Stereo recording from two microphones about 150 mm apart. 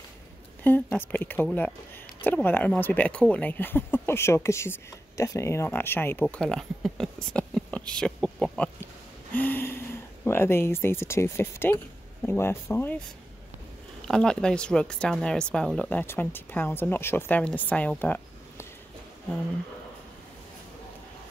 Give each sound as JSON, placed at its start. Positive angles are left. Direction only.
{"t": 0.7, "sound": "speech", "side_deg": 15}
{"t": 14.0, "sound": "speech", "side_deg": 5}